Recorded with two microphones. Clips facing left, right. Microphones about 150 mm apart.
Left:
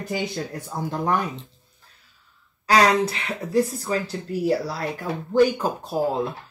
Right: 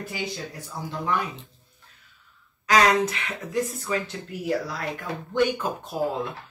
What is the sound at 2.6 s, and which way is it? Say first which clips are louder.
Speech: left 2 dB; 35° left (ahead or behind).